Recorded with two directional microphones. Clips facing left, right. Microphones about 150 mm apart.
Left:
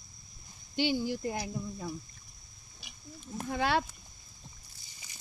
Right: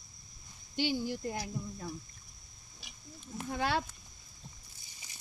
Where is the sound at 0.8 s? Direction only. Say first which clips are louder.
Left 3 dB; 90° left.